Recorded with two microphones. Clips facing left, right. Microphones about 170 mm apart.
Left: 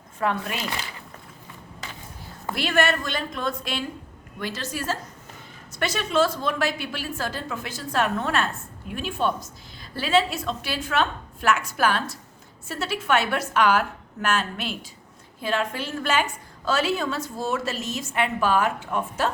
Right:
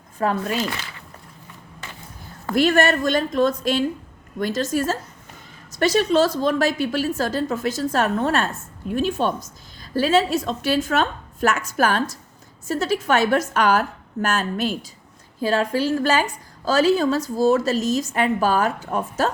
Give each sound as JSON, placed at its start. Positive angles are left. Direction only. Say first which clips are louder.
{"t": 0.2, "sound": "a woman's voice", "louder": "right 3 dB", "side_deg": -35}
{"t": 2.6, "sound": "a woman's voice", "louder": "right 6 dB", "side_deg": -45}